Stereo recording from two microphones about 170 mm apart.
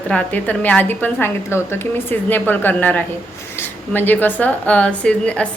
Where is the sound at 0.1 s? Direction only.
10° left (ahead or behind).